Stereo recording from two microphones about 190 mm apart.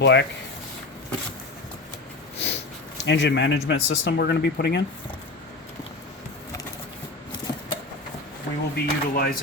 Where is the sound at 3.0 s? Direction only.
65° left (ahead or behind).